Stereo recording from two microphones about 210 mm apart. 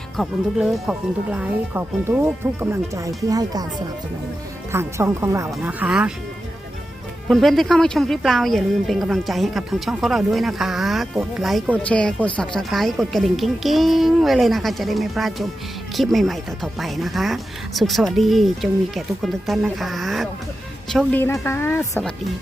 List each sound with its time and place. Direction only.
0.2 s speech: centre (ahead or behind); by 3.7 s 15° right (ahead or behind)
4.7 s a woman's voice: 10° right (ahead or behind)
7.3 s a woman's voice: centre (ahead or behind)